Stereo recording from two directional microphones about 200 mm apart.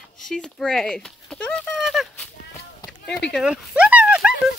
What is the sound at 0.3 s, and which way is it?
Speech, centre (ahead or behind).